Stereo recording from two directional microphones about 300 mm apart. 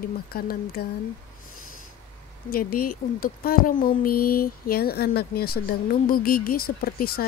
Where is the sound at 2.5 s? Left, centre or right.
Left.